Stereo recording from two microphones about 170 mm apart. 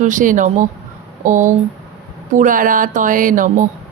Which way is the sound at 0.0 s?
50° right (ahead or behind).